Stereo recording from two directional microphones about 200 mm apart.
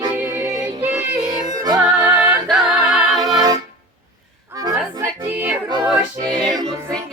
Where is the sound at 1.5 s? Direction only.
20° right (ahead or behind).